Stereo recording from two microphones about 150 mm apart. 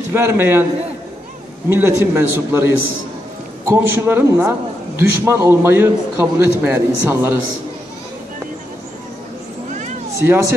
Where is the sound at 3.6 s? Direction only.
15° right (ahead or behind).